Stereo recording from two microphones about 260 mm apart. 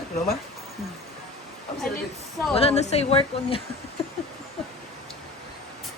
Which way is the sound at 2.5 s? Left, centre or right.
Left.